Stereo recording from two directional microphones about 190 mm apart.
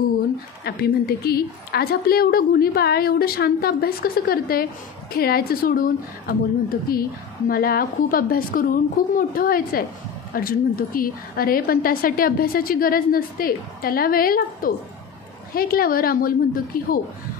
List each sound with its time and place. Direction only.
0.7 s a woman's voice: 55° left (ahead or behind)